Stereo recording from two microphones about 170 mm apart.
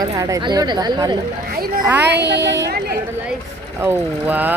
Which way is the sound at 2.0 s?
80° right.